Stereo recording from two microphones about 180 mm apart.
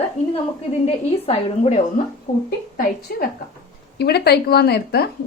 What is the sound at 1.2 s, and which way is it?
Speech, 40° left (ahead or behind).